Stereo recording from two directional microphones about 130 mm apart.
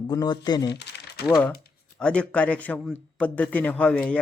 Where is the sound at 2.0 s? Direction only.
10° left (ahead or behind).